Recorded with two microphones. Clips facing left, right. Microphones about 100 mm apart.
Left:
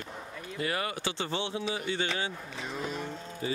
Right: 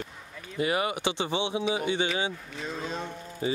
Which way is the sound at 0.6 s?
15° right (ahead or behind).